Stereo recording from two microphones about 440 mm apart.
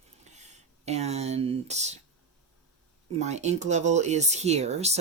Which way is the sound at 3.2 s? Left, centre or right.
Centre.